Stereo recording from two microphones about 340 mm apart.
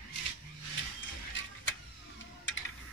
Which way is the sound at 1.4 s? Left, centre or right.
Left.